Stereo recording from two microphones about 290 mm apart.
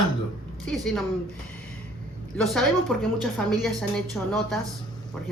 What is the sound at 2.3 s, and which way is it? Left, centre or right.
Speech, centre.